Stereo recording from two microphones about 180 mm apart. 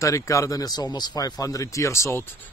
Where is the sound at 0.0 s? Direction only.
15° left (ahead or behind).